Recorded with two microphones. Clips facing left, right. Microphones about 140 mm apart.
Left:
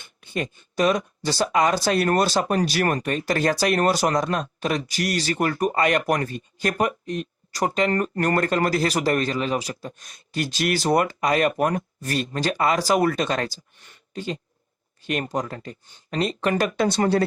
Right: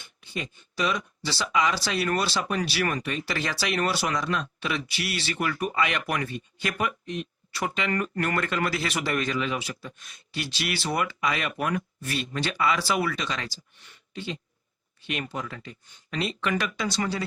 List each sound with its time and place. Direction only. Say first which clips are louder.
0.0 s speech: left 7 dB; 50° left (ahead or behind)